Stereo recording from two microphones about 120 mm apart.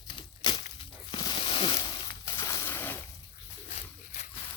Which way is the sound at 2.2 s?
25° left (ahead or behind).